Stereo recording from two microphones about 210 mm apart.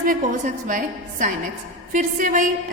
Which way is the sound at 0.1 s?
40° right (ahead or behind).